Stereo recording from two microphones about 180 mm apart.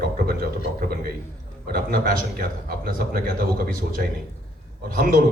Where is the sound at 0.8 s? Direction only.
55° right (ahead or behind).